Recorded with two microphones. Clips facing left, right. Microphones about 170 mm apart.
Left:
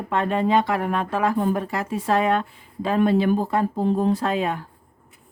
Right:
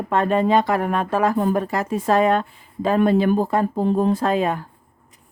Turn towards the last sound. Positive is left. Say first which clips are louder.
# right 3 dB
turn(degrees=-45)  # may be behind; listen again after turning